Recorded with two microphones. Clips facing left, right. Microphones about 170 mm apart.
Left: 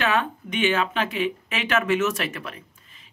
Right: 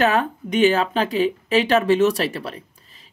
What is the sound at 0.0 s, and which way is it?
Speech, 40° right (ahead or behind).